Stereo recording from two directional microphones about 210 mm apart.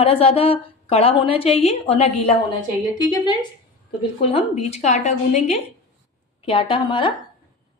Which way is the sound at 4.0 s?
30° left (ahead or behind).